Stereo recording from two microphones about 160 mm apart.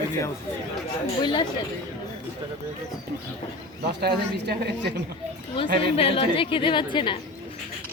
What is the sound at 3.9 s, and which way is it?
Speech, 90° right.